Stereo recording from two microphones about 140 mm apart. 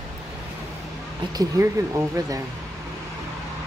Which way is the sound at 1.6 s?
20° right (ahead or behind).